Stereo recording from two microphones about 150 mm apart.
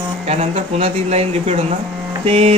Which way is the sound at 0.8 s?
45° right (ahead or behind).